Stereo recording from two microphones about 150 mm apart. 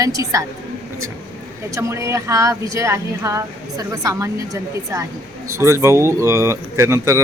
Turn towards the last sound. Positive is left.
turn(degrees=-15)  # may be behind; listen again after turning